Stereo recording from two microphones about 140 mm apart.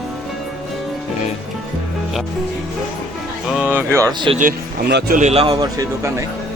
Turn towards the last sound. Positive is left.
turn(degrees=-25)  # may be behind; listen again after turning